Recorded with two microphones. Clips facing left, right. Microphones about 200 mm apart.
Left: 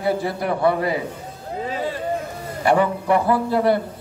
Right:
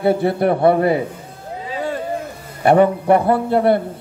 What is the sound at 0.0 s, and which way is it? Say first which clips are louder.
Speech: right 6 dB; 60° right (ahead or behind).